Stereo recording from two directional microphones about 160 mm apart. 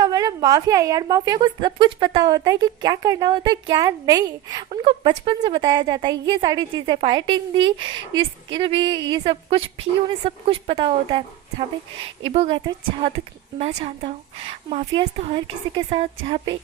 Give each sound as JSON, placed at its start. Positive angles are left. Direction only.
{"t": 0.0, "sound": "a woman's voice", "side_deg": -25}
{"t": 12.2, "sound": "a woman's voice", "side_deg": -40}
{"t": 13.6, "sound": "a woman's voice", "side_deg": -40}